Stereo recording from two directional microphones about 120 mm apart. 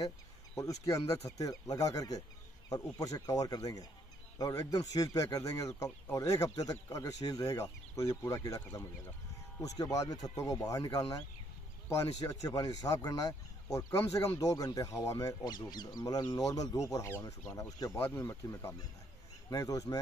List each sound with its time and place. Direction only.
0.6 s a man's voice: 25° left (ahead or behind)